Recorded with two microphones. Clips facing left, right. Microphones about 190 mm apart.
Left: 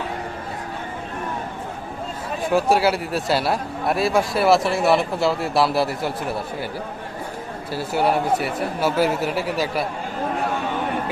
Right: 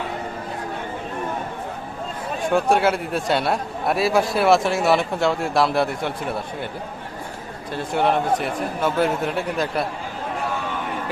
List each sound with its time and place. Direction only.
2.5 s a man's voice: 5° left (ahead or behind)
7.7 s a man's voice: 5° left (ahead or behind)